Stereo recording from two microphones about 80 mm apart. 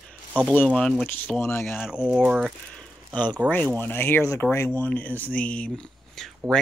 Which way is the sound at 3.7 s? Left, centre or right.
Left.